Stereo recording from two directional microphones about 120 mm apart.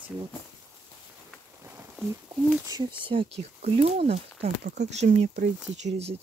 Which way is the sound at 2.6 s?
35° right (ahead or behind).